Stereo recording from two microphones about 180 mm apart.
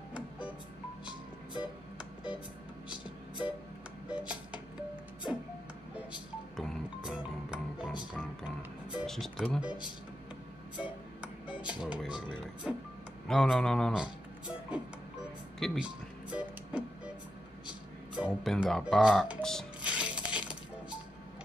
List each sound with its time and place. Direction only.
1.6 s music: 5° right (ahead or behind)
4.1 s music: 5° right (ahead or behind)
6.5 s music: centre (ahead or behind)
8.9 s speech: centre (ahead or behind)
9.7 s speech: 25° left (ahead or behind)
10.8 s music: 5° right (ahead or behind)
13.3 s music: centre (ahead or behind)
18.1 s cash register: centre (ahead or behind)